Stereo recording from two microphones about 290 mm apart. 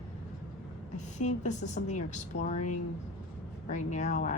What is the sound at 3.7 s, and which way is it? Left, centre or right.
Speech, left.